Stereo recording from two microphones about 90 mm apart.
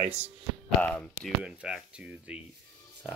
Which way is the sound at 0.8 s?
15° left (ahead or behind).